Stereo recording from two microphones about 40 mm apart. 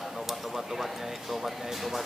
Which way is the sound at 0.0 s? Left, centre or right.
Centre.